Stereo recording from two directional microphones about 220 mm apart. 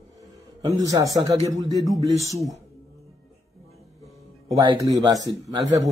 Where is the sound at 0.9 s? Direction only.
15° right (ahead or behind).